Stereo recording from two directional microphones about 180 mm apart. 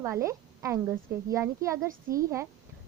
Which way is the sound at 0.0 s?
15° right (ahead or behind).